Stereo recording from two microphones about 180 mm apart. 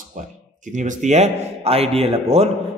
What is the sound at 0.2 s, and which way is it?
A man's voice, 45° right (ahead or behind).